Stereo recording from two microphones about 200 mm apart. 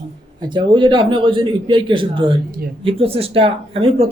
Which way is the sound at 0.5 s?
25° right (ahead or behind).